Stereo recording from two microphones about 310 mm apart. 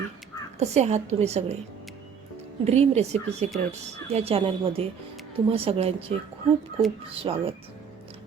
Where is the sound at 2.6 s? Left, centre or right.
Right.